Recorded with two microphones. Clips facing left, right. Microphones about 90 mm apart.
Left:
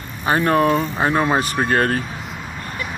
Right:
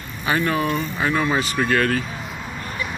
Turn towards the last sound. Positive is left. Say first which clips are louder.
# left 1 dB
turn(degrees=40)  # may be behind; listen again after turning